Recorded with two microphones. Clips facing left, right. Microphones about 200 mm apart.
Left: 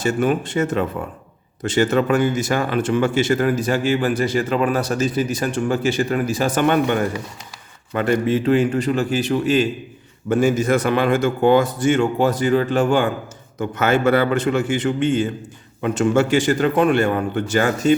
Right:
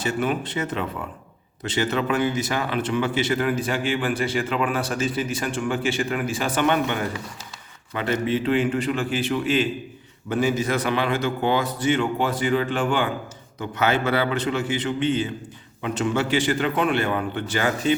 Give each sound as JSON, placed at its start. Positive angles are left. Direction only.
{"t": 0.0, "sound": "a man's voice", "side_deg": 45}